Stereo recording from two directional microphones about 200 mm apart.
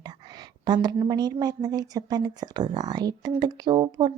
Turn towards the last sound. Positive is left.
turn(degrees=-20)  # may be behind; listen again after turning